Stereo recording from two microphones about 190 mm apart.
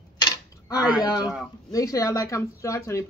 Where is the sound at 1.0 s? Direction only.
20° left (ahead or behind).